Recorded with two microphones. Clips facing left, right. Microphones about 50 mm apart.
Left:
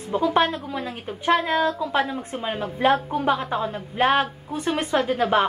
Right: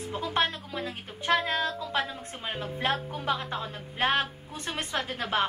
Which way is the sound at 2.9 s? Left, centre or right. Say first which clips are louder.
Left 8 dB; left.